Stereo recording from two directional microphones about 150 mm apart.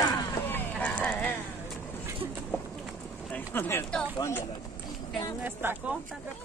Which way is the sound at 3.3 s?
15° left (ahead or behind).